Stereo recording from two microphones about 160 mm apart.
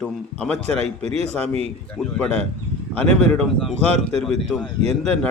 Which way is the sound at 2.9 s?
40° right (ahead or behind).